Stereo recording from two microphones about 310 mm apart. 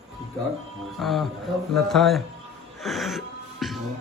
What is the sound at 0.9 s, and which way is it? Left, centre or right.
A man's voice, centre.